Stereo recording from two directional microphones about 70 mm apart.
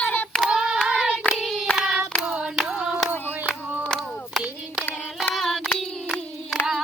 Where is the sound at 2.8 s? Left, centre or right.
Centre.